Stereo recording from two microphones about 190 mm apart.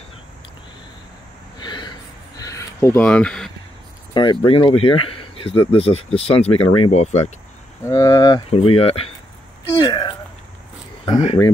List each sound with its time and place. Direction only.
1.6 s a sound: 25° left (ahead or behind); by 3.5 s 5° left (ahead or behind)
4.1 s speech: 25° left (ahead or behind)
7.8 s speech: 20° left (ahead or behind)
8.5 s speech: 30° left (ahead or behind)
9.8 s a sound: 25° left (ahead or behind)
11.1 s speech: 30° left (ahead or behind)